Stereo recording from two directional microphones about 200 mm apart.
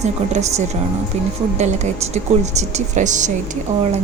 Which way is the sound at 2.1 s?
35° right (ahead or behind).